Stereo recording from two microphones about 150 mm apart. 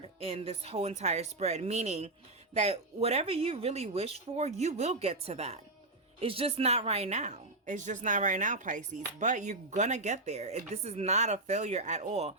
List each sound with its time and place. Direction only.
0.2 s a woman's voice: 40° right (ahead or behind)